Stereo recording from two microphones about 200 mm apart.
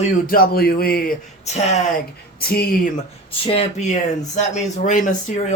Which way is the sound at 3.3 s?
30° left (ahead or behind).